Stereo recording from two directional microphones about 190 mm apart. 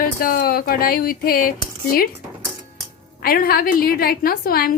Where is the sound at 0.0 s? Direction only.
50° left (ahead or behind).